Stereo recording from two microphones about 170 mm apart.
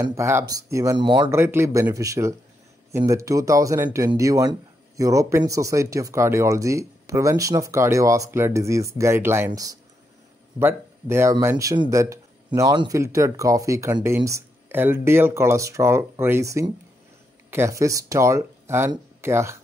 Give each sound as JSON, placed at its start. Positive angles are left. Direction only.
{"t": 0.0, "sound": "speech", "side_deg": -15}
{"t": 1.3, "sound": "speech", "side_deg": -15}